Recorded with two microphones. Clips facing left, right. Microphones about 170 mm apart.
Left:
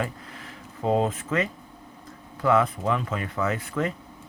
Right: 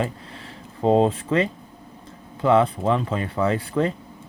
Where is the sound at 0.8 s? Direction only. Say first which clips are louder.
Right 6 dB; 30° right (ahead or behind).